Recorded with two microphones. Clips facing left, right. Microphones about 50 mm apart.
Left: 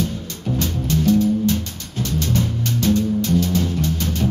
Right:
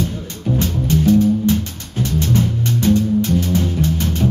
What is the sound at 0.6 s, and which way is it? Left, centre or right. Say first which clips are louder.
Music: right 3 dB; right.